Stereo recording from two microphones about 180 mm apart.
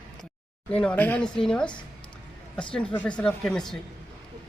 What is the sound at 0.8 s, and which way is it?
Speech, 10° left (ahead or behind).